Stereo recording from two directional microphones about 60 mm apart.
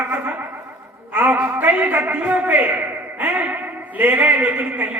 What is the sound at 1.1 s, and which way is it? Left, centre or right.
A man's voice, right.